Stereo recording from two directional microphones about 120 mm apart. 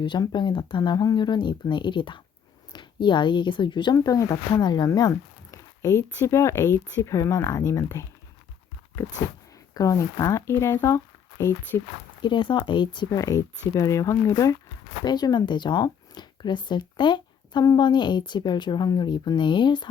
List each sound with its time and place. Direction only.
0.0 s speech: 40° left (ahead or behind)
9.7 s speech: 25° left (ahead or behind)
12.2 s speech: 40° left (ahead or behind)
13.1 s speech: 30° left (ahead or behind)